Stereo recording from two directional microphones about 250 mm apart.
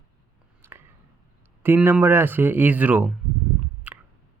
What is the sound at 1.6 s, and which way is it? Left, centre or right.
Speech, centre.